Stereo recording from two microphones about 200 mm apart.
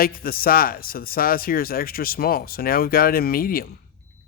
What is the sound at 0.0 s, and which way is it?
Speech, 45° left (ahead or behind).